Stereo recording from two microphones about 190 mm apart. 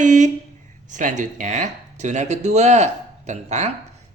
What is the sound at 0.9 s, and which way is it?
Speech, 40° right (ahead or behind).